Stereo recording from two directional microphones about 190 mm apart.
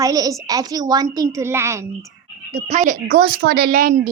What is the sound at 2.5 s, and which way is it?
Speech, 40° right (ahead or behind).